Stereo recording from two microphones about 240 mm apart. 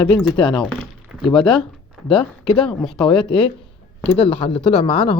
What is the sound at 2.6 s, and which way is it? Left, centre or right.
Speech, centre.